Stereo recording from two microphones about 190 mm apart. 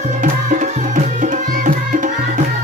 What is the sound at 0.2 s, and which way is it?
Music, 40° right (ahead or behind).